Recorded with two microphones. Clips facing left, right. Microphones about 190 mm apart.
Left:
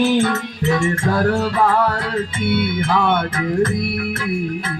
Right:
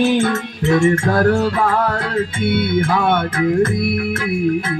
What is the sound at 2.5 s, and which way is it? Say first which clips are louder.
Music: right 1 dB; 50° right (ahead or behind).